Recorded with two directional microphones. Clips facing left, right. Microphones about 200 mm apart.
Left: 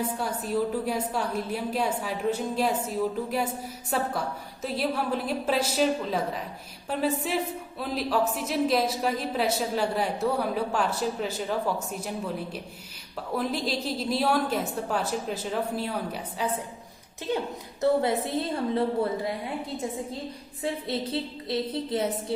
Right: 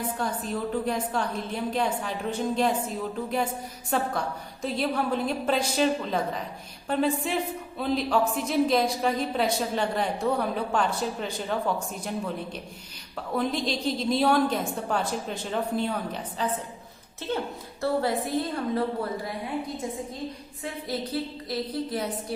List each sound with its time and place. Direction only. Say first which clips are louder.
0.2 s a woman's voice: left 2 dB; 5° left (ahead or behind)
17.2 s a woman's voice: left 1 dB; 20° left (ahead or behind)
20.8 s a woman's voice: even; 25° left (ahead or behind)